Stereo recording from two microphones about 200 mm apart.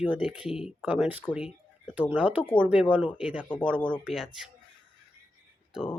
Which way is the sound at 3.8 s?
5° left (ahead or behind).